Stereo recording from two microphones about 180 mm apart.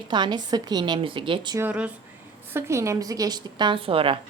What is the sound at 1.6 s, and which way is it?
A woman's voice, 10° right (ahead or behind).